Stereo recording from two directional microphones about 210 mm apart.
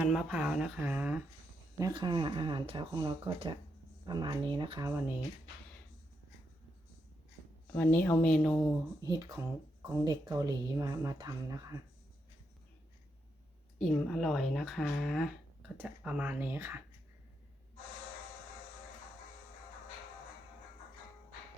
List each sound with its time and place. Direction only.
0.0 s speech: 5° right (ahead or behind)
1.8 s speech: 20° right (ahead or behind)
7.7 s speech: 10° left (ahead or behind)
9.0 s speech: 15° right (ahead or behind)
13.7 s speech: centre (ahead or behind)
15.8 s speech: 10° right (ahead or behind)